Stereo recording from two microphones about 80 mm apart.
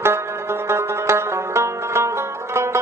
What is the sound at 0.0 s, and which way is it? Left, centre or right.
Music, right.